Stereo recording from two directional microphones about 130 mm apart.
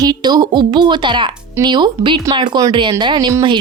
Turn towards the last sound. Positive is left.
turn(degrees=-35)  # may be behind; listen again after turning